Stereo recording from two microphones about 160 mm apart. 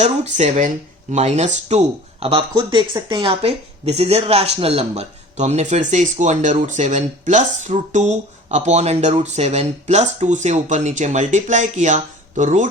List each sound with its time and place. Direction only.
0.0 s speech: 45° right (ahead or behind)
2.6 s speech: 25° right (ahead or behind); by 12.6 s 50° right (ahead or behind)